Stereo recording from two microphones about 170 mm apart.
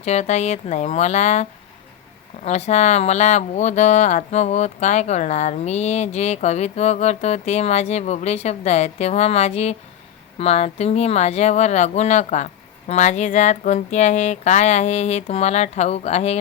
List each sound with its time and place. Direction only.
0.0 s speech: 40° left (ahead or behind)